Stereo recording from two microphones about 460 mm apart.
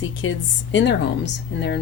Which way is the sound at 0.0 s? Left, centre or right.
Left.